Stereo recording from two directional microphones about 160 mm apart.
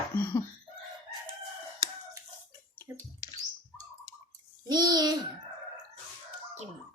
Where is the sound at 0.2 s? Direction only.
15° left (ahead or behind).